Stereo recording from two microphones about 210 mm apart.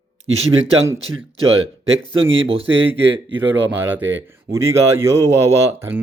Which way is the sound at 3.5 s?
10° right (ahead or behind).